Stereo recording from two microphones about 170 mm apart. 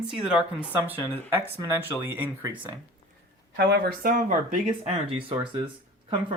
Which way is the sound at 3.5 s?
80° right.